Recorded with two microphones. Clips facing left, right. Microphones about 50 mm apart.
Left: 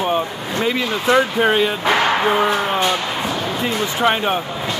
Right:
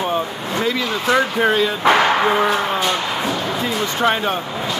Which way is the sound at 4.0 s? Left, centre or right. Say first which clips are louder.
Left 1 dB; centre.